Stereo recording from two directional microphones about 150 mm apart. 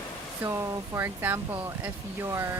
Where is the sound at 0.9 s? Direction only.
15° right (ahead or behind).